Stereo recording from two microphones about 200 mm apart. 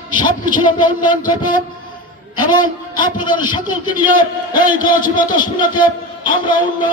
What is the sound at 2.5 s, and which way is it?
A man's voice, 20° left (ahead or behind).